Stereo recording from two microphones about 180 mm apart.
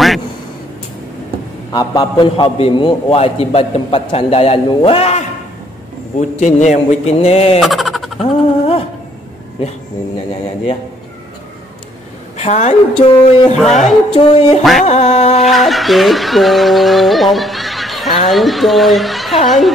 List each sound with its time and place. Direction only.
1.7 s a man's voice: 25° left (ahead or behind)
7.6 s vehicle: centre (ahead or behind)
8.2 s a sound: 35° left (ahead or behind)
12.4 s a man's voice: 40° left (ahead or behind)
13.6 s speech: centre (ahead or behind)
14.1 s a man's voice: 35° left (ahead or behind)
14.6 s speech: centre (ahead or behind)
14.9 s a man's voice: 35° left (ahead or behind)
15.4 s speech: centre (ahead or behind)